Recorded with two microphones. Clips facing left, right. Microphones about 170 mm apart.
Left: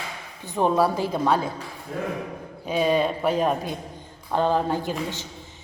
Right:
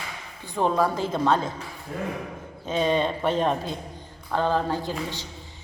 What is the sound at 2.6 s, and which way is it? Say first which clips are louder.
A woman's voice: left 2 dB; 10° left (ahead or behind).